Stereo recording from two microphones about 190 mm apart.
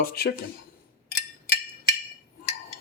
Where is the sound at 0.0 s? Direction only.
55° left (ahead or behind).